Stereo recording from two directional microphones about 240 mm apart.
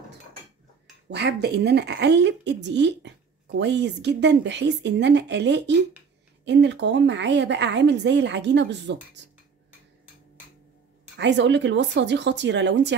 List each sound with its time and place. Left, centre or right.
1.1 s a woman's voice: right
11.1 s a woman's voice: right